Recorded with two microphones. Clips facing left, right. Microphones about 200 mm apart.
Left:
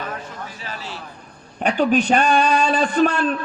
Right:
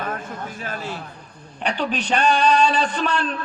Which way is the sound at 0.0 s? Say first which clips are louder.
Right 2 dB; 50° right (ahead or behind).